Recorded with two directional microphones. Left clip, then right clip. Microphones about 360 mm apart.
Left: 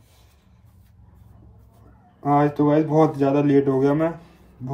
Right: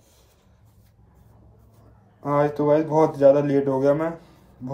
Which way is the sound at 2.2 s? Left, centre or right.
Centre.